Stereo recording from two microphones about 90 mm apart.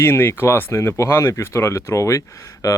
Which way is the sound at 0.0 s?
25° left (ahead or behind).